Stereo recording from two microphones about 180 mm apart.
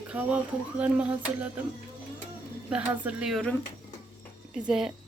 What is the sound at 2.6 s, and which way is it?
Speech, 10° right (ahead or behind).